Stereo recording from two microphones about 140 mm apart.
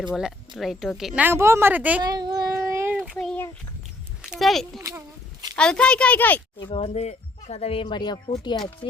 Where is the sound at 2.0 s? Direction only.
30° right (ahead or behind).